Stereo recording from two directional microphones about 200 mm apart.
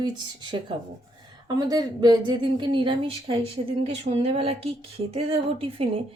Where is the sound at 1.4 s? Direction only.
20° right (ahead or behind).